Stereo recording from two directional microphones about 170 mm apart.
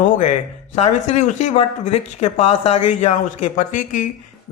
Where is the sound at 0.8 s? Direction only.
40° left (ahead or behind).